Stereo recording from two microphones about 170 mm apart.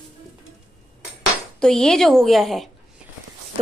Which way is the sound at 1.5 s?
5° left (ahead or behind).